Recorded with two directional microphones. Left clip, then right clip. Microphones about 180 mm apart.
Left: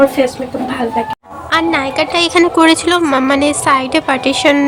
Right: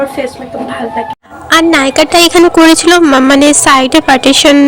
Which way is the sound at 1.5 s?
40° right (ahead or behind).